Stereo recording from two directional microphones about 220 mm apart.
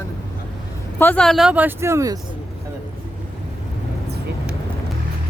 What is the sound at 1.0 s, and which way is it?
A woman's voice, 5° left (ahead or behind).